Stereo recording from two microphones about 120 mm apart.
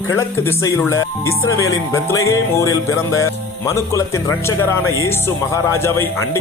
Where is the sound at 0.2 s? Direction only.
20° left (ahead or behind).